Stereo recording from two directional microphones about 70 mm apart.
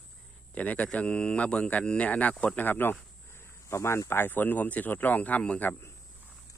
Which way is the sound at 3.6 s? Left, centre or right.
Left.